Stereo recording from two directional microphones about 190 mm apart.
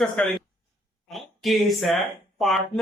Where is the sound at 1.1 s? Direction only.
Centre (ahead or behind).